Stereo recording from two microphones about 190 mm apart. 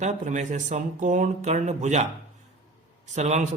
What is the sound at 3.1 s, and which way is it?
Speech, 35° right (ahead or behind).